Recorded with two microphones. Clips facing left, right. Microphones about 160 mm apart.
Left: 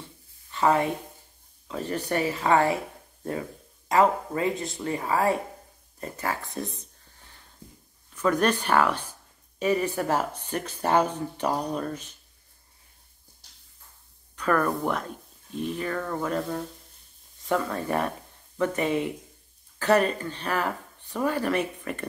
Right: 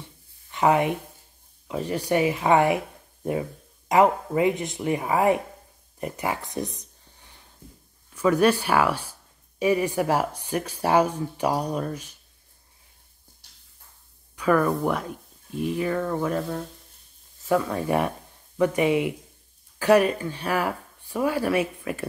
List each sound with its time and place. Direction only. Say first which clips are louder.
0.5 s speech: right 2 dB; 15° right (ahead or behind)
3.9 s speech: right 3 dB; 15° right (ahead or behind)
5.9 s a sound: right 3 dB; 15° right (ahead or behind)
8.1 s speech: right 4 dB; 10° right (ahead or behind)
14.3 s speech: right 3 dB; 5° right (ahead or behind)